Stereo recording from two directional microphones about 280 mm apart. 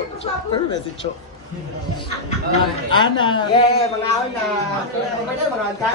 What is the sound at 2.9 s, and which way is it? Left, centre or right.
Speech, centre.